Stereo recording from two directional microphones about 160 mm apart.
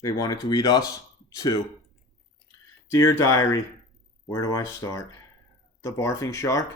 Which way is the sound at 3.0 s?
20° left (ahead or behind).